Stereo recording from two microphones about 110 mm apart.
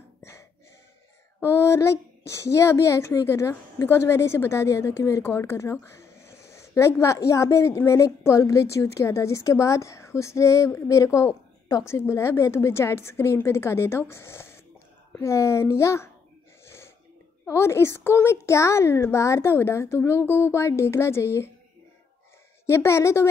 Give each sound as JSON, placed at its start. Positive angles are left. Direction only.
{"t": 0.2, "sound": "a sound", "side_deg": 25}
{"t": 1.4, "sound": "speech", "side_deg": 25}
{"t": 16.6, "sound": "wheeze", "side_deg": 20}
{"t": 17.5, "sound": "speech", "side_deg": 25}
{"t": 22.7, "sound": "speech", "side_deg": 25}